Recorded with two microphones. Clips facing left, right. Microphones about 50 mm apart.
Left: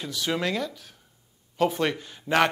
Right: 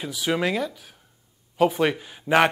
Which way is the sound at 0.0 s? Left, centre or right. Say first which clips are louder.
Right 3 dB; centre.